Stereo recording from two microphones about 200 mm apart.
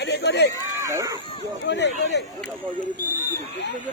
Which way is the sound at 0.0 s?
60° left (ahead or behind).